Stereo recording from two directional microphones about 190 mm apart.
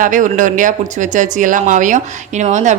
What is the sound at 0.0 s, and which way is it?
A woman's voice, 45° right (ahead or behind).